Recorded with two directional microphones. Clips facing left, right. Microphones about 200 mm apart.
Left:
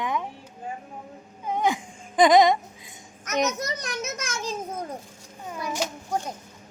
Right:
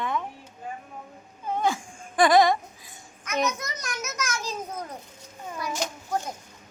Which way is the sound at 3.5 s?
35° left (ahead or behind).